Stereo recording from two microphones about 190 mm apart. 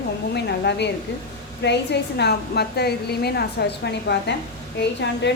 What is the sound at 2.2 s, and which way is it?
A woman's voice, 60° left (ahead or behind).